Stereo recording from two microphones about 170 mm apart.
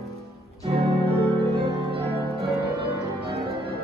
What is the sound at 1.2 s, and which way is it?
Music, 35° right (ahead or behind).